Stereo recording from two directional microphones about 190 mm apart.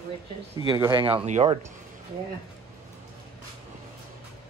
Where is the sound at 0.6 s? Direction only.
25° right (ahead or behind).